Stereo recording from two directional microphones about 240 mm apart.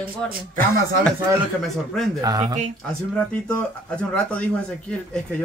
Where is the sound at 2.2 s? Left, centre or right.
Centre.